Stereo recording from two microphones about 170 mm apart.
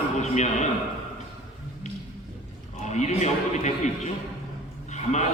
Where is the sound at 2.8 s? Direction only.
45° left (ahead or behind).